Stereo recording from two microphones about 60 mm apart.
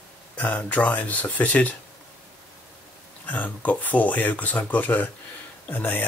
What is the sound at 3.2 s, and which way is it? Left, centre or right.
Speech, left.